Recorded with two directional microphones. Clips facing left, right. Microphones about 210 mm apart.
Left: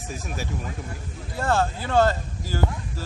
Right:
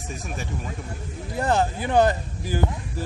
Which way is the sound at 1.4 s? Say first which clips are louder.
Right 1 dB; 20° right (ahead or behind).